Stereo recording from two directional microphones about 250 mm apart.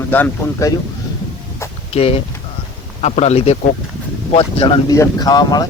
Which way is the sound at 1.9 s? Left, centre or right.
Left.